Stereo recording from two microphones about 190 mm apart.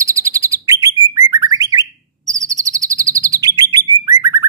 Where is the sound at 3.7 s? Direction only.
15° right (ahead or behind).